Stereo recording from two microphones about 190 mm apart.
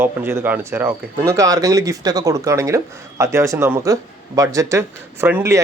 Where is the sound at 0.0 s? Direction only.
10° right (ahead or behind).